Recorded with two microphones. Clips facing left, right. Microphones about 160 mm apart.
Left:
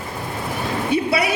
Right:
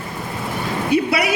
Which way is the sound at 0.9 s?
30° left (ahead or behind).